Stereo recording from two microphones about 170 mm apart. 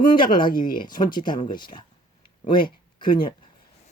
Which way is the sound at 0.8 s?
25° left (ahead or behind).